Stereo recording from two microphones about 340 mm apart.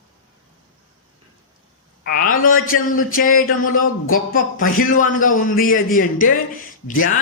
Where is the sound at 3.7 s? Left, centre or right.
Left.